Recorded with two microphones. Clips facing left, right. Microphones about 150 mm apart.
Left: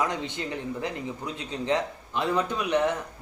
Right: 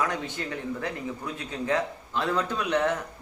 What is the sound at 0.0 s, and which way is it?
Speech, 20° left (ahead or behind).